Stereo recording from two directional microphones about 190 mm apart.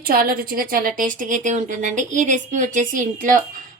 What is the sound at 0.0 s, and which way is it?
A woman's voice, 50° right (ahead or behind).